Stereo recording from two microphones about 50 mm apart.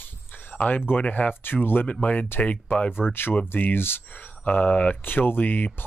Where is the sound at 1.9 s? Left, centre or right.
Left.